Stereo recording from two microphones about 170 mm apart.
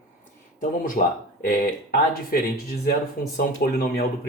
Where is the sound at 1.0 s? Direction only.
50° left (ahead or behind).